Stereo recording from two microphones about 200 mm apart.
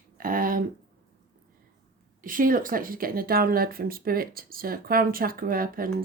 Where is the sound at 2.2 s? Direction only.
45° right (ahead or behind).